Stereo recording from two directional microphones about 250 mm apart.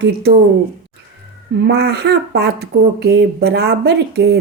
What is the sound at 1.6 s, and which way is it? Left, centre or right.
Speech, right.